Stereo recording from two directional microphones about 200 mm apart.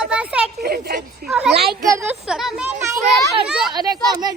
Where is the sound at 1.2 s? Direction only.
5° right (ahead or behind).